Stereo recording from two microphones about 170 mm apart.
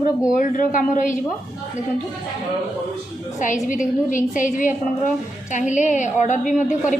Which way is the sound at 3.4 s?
50° left (ahead or behind).